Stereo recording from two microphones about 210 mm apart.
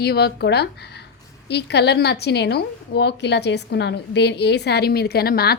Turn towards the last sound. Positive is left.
turn(degrees=50)  # may be behind; listen again after turning